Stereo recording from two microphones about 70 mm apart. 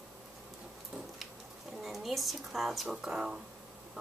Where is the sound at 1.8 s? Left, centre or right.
Centre.